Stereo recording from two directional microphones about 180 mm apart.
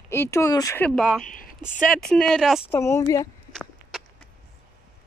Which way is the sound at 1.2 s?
50° left (ahead or behind).